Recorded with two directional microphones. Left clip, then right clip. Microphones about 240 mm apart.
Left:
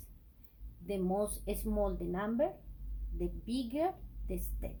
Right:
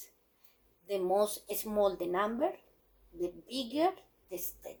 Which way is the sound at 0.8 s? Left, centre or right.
Right.